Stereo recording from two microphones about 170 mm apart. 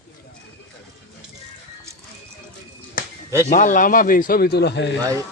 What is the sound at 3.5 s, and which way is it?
Speech, 50° left (ahead or behind).